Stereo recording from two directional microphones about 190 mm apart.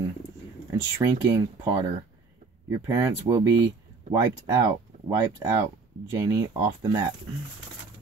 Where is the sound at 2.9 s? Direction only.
15° right (ahead or behind).